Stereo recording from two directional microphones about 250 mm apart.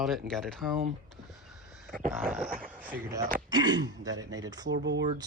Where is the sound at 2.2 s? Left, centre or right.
Centre.